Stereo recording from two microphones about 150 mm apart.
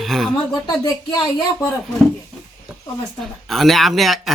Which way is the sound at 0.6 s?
25° left (ahead or behind).